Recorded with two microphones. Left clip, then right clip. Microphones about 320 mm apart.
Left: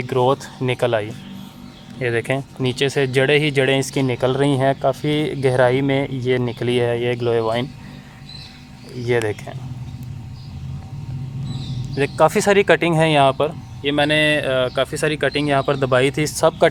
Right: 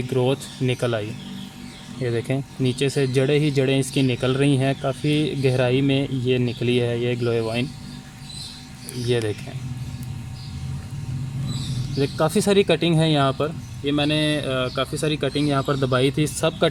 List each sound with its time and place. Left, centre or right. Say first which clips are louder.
0.3 s speech: left 5 dB; centre
11.9 s speech: left 6 dB; left